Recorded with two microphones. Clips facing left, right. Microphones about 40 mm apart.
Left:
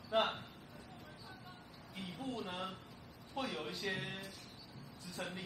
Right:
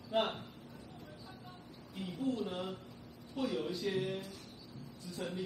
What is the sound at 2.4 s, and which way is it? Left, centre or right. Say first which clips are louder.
Speech: right 4 dB; centre.